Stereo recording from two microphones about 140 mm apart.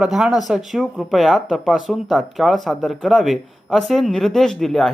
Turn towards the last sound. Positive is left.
turn(degrees=0)  # may be behind; listen again after turning